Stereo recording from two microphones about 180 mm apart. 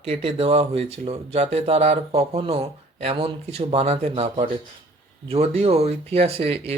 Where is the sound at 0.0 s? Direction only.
30° right (ahead or behind).